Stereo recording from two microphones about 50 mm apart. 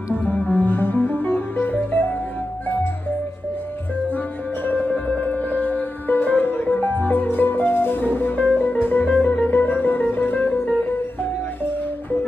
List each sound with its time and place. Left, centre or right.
0.5 s music: left
4.6 s music: left